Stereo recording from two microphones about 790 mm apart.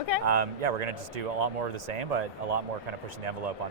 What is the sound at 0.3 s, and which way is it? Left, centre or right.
Speech, right.